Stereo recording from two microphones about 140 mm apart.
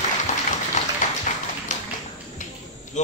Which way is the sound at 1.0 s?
65° left (ahead or behind).